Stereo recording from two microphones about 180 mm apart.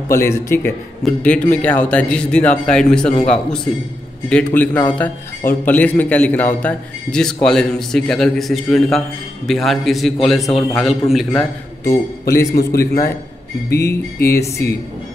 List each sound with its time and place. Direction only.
0.1 s a man's voice: 15° left (ahead or behind); by 11.4 s centre (ahead or behind)
12.5 s a man's voice: 55° left (ahead or behind)
14.2 s a man's voice: 15° left (ahead or behind)